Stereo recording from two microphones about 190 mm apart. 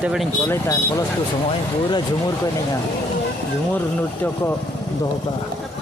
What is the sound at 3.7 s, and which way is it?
Speech, 10° left (ahead or behind).